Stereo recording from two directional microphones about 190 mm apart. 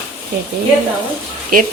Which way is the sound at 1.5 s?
50° right (ahead or behind).